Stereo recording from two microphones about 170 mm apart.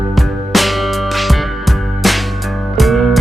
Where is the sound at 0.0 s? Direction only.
Centre (ahead or behind).